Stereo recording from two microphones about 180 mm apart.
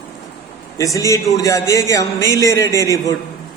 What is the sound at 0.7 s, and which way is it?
A man's voice, 20° left (ahead or behind).